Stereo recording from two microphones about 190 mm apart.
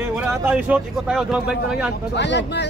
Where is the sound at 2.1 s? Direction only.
65° left (ahead or behind).